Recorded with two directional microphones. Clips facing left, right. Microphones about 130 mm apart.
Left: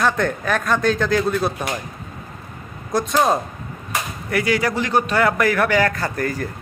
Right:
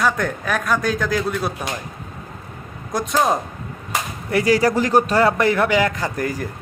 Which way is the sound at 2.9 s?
15° right (ahead or behind).